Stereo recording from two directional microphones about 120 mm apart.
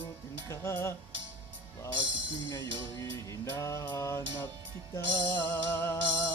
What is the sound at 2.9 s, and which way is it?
Music, 25° left (ahead or behind).